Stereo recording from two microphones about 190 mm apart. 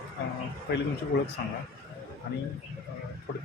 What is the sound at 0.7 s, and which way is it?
Speech, 60° left (ahead or behind).